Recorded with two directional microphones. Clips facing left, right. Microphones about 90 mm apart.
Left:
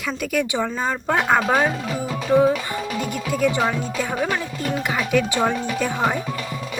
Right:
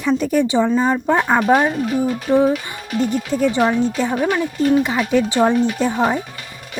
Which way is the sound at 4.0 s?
20° right (ahead or behind).